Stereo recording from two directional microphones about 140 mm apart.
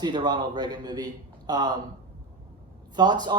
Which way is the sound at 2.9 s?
30° right (ahead or behind).